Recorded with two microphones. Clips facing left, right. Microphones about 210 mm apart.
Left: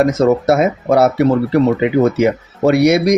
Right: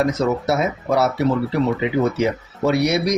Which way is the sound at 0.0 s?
50° left (ahead or behind).